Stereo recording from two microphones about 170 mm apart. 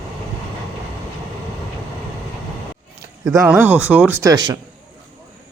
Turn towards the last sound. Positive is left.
turn(degrees=-20)  # may be behind; listen again after turning